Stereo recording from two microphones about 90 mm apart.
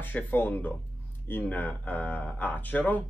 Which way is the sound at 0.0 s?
20° left (ahead or behind).